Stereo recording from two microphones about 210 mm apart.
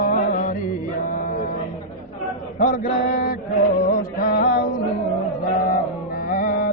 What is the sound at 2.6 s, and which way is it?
Male singing, 45° left (ahead or behind).